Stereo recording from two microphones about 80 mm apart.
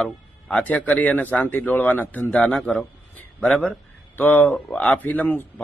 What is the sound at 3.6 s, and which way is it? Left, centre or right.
A man's voice, left.